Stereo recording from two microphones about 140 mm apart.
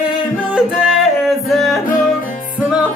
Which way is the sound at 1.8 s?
75° left (ahead or behind).